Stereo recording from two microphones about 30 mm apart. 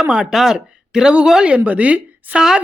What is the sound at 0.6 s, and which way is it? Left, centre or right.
Speech, right.